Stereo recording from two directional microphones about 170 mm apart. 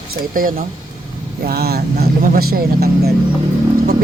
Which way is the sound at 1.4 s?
65° right (ahead or behind).